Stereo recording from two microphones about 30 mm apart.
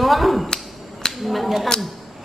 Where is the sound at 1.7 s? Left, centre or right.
Centre.